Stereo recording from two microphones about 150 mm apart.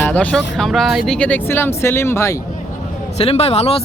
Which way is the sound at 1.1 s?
10° left (ahead or behind).